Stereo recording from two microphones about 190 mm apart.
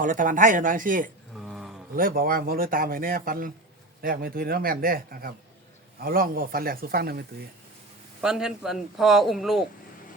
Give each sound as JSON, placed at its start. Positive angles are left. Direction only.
{"t": 0.0, "sound": "speech", "side_deg": -45}
{"t": 1.4, "sound": "a sound", "side_deg": 0}
{"t": 2.0, "sound": "speech", "side_deg": -50}
{"t": 8.2, "sound": "a man's voice", "side_deg": -5}